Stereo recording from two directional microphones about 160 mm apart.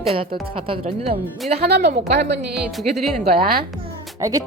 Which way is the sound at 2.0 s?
90° right.